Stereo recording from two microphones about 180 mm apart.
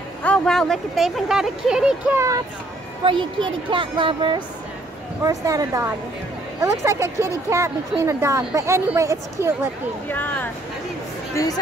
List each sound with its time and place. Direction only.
0.2 s speech: 5° left (ahead or behind); by 2.4 s 15° right (ahead or behind)
3.0 s a woman's voice: 30° right (ahead or behind)
10.0 s speech: 10° left (ahead or behind)